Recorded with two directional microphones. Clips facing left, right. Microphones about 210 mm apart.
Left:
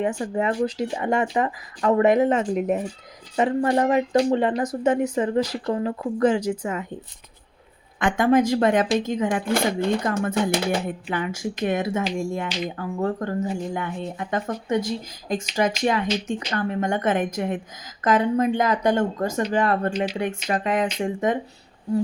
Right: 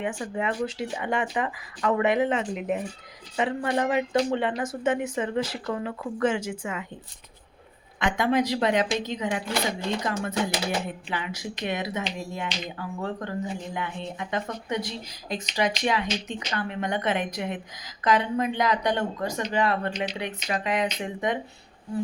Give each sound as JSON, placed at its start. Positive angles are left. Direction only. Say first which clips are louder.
{"t": 0.0, "sound": "speech", "louder": "left 5 dB", "side_deg": 40}
{"t": 7.9, "sound": "speech", "louder": "left 5 dB", "side_deg": 50}